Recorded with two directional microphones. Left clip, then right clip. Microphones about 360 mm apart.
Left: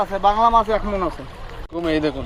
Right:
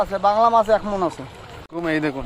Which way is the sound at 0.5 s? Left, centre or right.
Centre.